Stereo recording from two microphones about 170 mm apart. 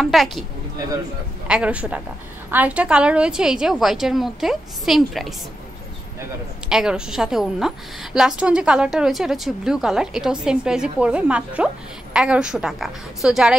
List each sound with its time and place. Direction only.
0.0 s a woman's voice: centre (ahead or behind)
1.5 s a woman's voice: 5° right (ahead or behind)
6.7 s a woman's voice: 5° right (ahead or behind)